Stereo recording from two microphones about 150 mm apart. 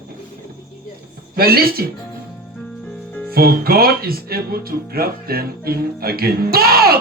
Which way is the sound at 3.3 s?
90° right.